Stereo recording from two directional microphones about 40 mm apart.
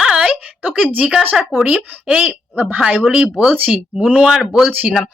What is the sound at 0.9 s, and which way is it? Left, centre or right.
A woman's voice, right.